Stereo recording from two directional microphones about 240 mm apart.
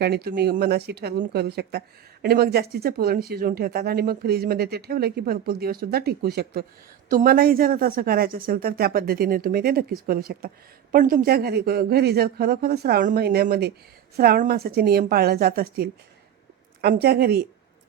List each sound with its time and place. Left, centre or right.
0.0 s speech: right